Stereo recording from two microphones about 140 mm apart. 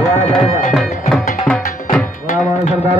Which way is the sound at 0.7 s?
Centre (ahead or behind).